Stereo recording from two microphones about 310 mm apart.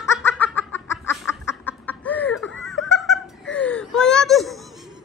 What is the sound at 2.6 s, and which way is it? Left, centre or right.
Giggle, centre.